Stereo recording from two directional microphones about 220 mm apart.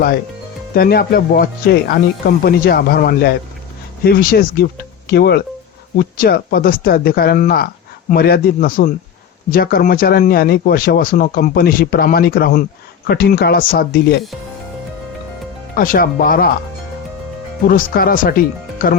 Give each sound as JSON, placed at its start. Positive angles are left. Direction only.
{"t": 0.7, "sound": "speech", "side_deg": 45}
{"t": 15.7, "sound": "speech", "side_deg": 40}
{"t": 17.7, "sound": "speech", "side_deg": 40}